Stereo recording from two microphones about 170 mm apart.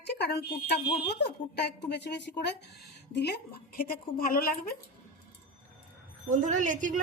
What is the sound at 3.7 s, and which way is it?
Speech, 60° left (ahead or behind).